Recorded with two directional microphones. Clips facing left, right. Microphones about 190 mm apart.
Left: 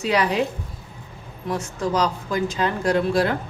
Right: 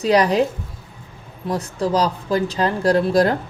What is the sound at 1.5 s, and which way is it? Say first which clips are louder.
Speech: right 3 dB; 35° right (ahead or behind).